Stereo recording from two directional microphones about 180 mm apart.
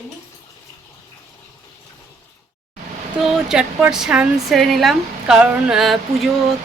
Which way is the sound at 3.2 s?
Centre (ahead or behind).